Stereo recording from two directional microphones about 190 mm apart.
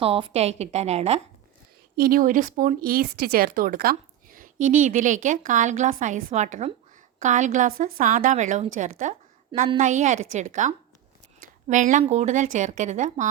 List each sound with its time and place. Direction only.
0.0 s a woman's voice: 30° right (ahead or behind)
2.0 s a woman's voice: 50° right (ahead or behind)
9.5 s a woman's voice: 25° right (ahead or behind)
9.8 s a woman's voice: 40° right (ahead or behind)